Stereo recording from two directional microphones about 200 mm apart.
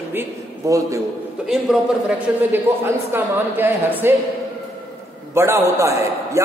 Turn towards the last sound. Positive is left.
turn(degrees=-15)  # may be behind; listen again after turning